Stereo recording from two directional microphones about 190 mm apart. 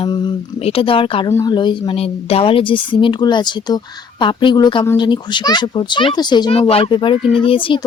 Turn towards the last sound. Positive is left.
turn(degrees=25)  # may be behind; listen again after turning